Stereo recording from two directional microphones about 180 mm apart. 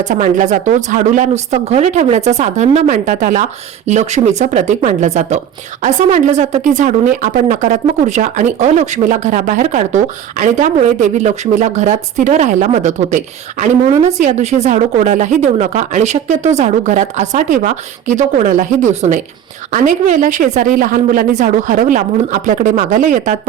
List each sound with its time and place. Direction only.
0.0 s a woman's voice: 45° right (ahead or behind)